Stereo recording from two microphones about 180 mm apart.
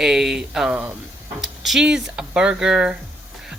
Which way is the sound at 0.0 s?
Centre (ahead or behind).